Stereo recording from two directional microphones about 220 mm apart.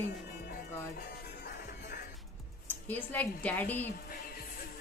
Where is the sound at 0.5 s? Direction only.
45° left (ahead or behind).